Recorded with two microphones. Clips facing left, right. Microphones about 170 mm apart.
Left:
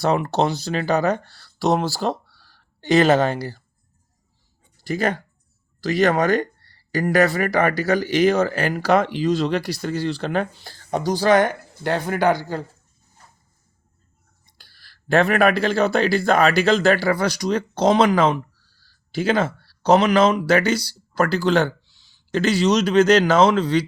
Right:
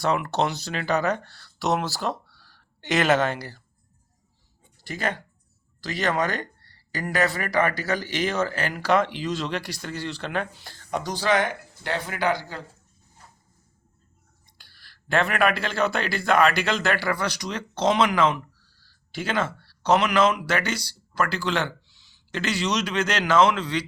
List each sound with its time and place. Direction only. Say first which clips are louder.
0.0 s speech: left 4 dB; 35° left (ahead or behind)
4.8 s speech: left 7 dB; 40° left (ahead or behind)
14.6 s speech: left 2 dB; 35° left (ahead or behind)